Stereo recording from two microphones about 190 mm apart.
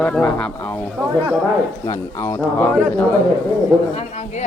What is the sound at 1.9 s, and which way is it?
Speech, 15° left (ahead or behind).